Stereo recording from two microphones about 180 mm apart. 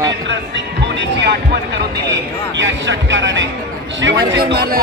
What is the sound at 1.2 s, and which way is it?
Speech, 65° right (ahead or behind).